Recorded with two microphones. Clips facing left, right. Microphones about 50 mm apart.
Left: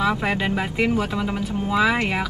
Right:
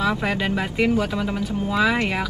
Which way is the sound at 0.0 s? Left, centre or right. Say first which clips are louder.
Left 1 dB; centre.